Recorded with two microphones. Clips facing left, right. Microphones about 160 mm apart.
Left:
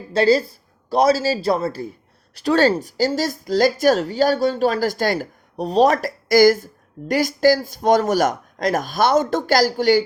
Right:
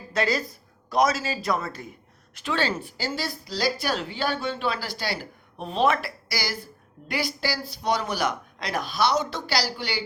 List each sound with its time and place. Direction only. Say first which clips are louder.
0.1 s a man's voice: left 10 dB; 30° left (ahead or behind)